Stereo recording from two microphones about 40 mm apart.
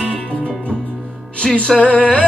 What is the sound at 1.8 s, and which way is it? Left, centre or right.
Music, left.